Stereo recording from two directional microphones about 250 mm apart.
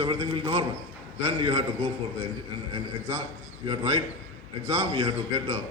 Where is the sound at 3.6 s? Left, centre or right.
Centre.